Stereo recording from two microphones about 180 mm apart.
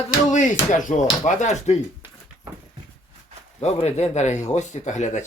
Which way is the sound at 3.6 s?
35° left (ahead or behind).